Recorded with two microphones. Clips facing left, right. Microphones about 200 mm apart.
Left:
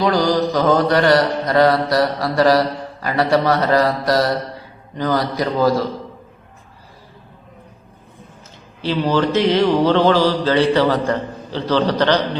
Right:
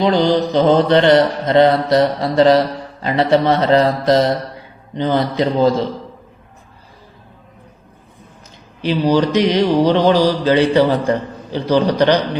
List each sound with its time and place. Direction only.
0.0 s mantra: 25° right (ahead or behind)
8.8 s speech: 15° right (ahead or behind)